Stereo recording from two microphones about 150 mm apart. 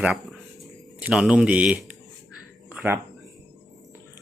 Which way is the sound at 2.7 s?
15° right (ahead or behind).